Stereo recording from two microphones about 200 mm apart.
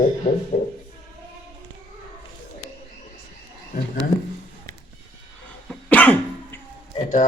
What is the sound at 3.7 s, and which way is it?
Speech, 45° left (ahead or behind).